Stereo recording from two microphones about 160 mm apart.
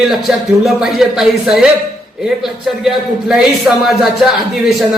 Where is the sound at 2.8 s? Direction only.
5° right (ahead or behind).